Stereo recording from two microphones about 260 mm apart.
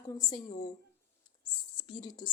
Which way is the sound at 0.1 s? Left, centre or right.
Centre.